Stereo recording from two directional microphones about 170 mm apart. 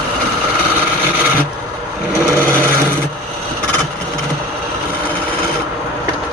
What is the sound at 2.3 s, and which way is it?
Sewing machine, 15° right (ahead or behind).